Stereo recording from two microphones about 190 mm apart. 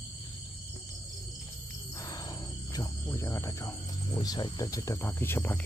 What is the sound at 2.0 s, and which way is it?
Wild animals, 20° left (ahead or behind).